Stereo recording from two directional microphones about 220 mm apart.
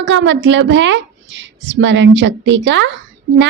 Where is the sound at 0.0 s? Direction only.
55° right (ahead or behind).